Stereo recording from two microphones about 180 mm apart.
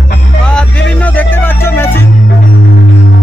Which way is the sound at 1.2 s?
10° left (ahead or behind).